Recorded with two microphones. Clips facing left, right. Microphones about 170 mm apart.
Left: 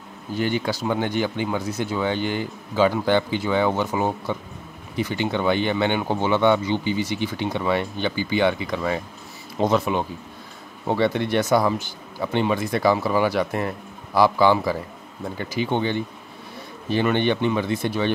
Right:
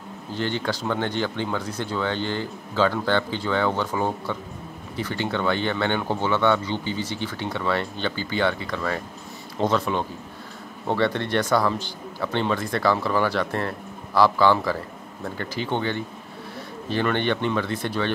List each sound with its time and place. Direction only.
0.3 s speech: 10° left (ahead or behind)